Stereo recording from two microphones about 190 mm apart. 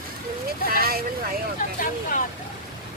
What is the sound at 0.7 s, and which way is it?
Vehicle, 50° right (ahead or behind).